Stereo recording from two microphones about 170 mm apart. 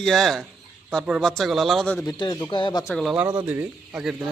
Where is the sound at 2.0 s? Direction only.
20° left (ahead or behind).